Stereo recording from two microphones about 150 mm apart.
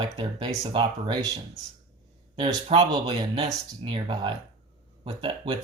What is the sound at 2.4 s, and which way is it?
Speech, 30° right (ahead or behind).